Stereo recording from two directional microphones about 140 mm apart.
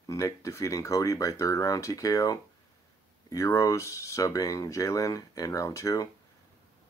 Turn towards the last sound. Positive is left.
turn(degrees=20)  # may be behind; listen again after turning